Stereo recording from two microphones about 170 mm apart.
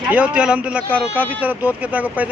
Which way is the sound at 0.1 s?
5° right (ahead or behind).